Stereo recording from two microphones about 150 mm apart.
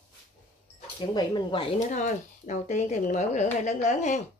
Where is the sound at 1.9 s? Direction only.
50° left (ahead or behind).